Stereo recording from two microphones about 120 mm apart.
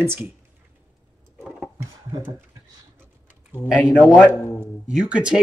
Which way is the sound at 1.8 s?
20° right (ahead or behind).